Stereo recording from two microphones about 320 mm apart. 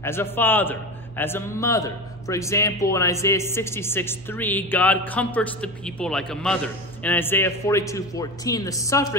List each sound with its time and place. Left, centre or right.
0.0 s a man's voice: centre